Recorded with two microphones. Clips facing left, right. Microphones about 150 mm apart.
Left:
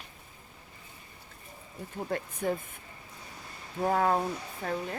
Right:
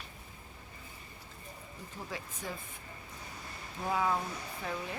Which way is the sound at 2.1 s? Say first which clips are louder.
Left 10 dB; 55° left (ahead or behind).